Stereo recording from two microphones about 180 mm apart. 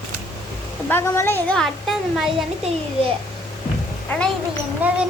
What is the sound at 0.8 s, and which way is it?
A woman's voice, 10° left (ahead or behind).